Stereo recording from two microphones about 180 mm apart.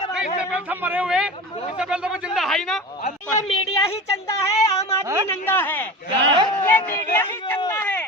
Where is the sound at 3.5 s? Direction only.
25° left (ahead or behind).